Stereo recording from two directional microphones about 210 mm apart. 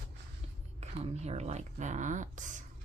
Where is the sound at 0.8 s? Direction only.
30° right (ahead or behind).